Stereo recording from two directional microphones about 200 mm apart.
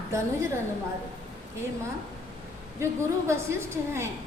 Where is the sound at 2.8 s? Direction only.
15° right (ahead or behind).